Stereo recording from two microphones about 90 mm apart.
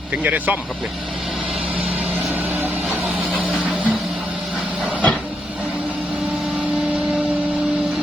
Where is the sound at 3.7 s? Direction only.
15° right (ahead or behind).